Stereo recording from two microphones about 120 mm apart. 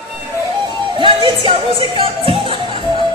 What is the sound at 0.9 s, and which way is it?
Music, 45° right (ahead or behind).